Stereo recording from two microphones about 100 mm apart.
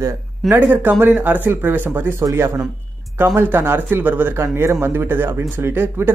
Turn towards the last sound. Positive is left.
turn(degrees=-25)  # may be behind; listen again after turning